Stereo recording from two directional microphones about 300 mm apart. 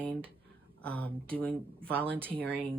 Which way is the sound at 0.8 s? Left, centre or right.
Centre.